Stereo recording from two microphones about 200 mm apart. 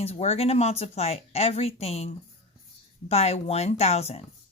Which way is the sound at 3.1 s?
30° left (ahead or behind).